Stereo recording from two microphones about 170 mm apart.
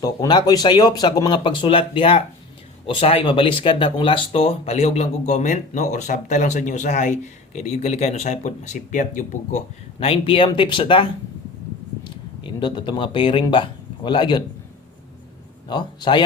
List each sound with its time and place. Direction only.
0.0 s speech: 25° left (ahead or behind); by 9.6 s 50° left (ahead or behind)
10.0 s speech: 35° left (ahead or behind)
15.6 s speech: 25° left (ahead or behind)